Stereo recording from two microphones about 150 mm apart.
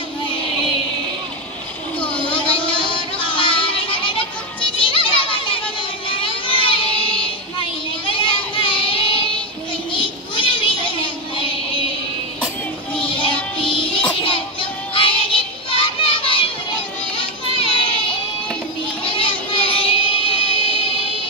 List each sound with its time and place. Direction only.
2.2 s music: 35° left (ahead or behind)
6.0 s a sound: 35° left (ahead or behind)
8.1 s child singing: 35° left (ahead or behind)
13.0 s music: 35° left (ahead or behind)
17.6 s child singing: 35° left (ahead or behind)